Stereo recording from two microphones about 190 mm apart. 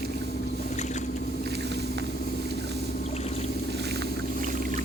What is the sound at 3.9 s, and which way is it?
Boat, 60° right (ahead or behind).